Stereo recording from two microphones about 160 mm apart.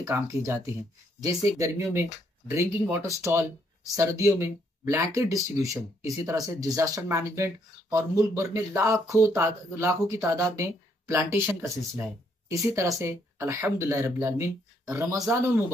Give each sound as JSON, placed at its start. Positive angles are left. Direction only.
{"t": 0.0, "sound": "speech", "side_deg": -20}